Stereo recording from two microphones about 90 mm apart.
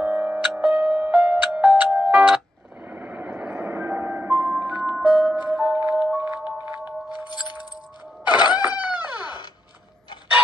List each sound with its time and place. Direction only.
0.0 s music: 15° right (ahead or behind)
2.9 s a sound: 20° right (ahead or behind)
3.5 s music: 25° right (ahead or behind)
8.3 s cat: 55° left (ahead or behind)